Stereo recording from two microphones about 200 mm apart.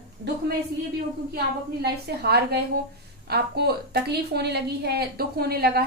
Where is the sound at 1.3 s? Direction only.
55° right (ahead or behind).